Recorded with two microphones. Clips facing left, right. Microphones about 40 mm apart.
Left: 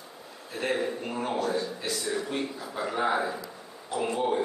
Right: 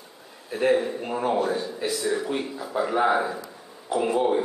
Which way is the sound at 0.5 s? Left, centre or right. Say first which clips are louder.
Right 7 dB; centre.